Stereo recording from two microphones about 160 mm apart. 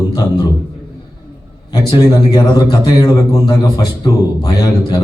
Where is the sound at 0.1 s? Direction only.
25° left (ahead or behind).